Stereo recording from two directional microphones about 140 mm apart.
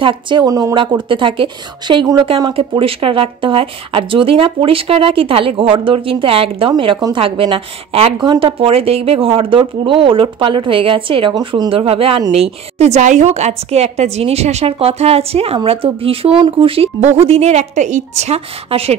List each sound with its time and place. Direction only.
0.0 s speech: 35° right (ahead or behind)
11.7 s a woman's voice: 40° right (ahead or behind)